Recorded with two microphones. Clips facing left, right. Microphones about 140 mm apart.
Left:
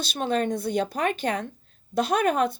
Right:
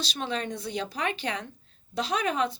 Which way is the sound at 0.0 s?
50° left (ahead or behind).